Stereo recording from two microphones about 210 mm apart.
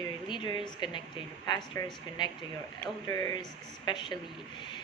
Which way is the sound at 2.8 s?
15° left (ahead or behind).